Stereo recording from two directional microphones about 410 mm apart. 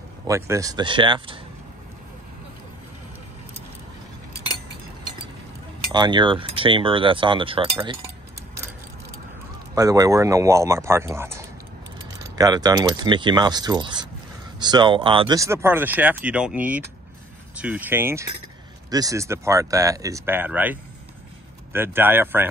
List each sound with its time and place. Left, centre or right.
0.3 s cutlery: centre
5.9 s cutlery: centre
9.8 s cutlery: centre
14.6 s speech: centre
18.9 s cutlery: centre
21.7 s speech: centre